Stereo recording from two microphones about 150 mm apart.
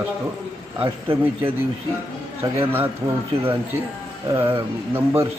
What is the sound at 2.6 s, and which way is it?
Speech, 15° right (ahead or behind).